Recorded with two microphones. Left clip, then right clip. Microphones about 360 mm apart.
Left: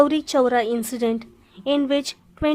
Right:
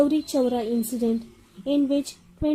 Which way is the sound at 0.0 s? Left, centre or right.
Left.